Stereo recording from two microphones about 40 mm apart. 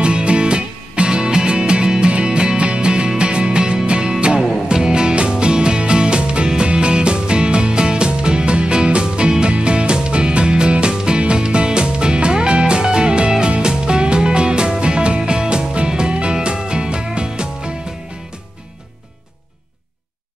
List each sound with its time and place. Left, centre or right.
0.0 s music: right